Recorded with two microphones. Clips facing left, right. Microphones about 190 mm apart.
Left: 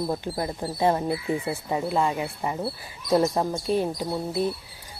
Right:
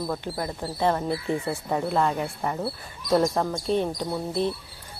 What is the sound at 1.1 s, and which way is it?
Speech, 5° left (ahead or behind).